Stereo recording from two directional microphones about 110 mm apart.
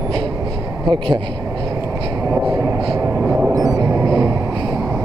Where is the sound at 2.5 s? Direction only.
30° right (ahead or behind).